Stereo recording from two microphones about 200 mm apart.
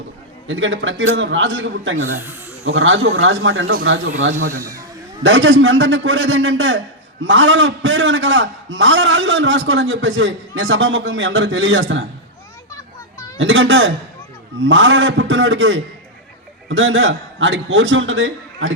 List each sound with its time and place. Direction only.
0.4 s a man's voice: 70° right (ahead or behind)
2.6 s a man's voice: 80° right
4.4 s speech: 40° right (ahead or behind)
4.6 s speech: 15° right (ahead or behind)
5.2 s a man's voice: 70° right (ahead or behind)
12.7 s children playing: 15° left (ahead or behind)
13.4 s a man's voice: 70° right (ahead or behind)